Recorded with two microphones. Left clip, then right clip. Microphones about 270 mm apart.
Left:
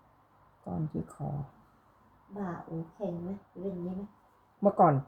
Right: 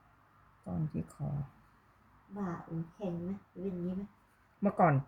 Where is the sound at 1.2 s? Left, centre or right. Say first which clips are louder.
Left 4 dB; right.